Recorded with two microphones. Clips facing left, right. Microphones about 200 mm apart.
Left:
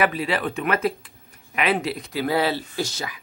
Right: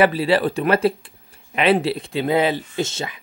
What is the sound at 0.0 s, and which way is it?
Speech, 30° right (ahead or behind).